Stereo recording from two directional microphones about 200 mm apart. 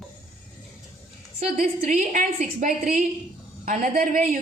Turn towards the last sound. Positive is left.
turn(degrees=-45)  # may be behind; listen again after turning